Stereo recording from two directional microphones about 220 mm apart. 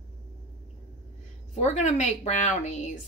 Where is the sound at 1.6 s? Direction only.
30° left (ahead or behind).